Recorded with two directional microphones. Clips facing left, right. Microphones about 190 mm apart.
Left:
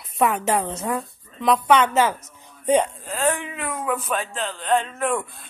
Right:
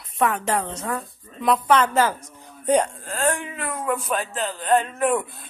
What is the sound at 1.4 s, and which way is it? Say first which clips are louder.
Speech: left 1 dB; centre (ahead or behind).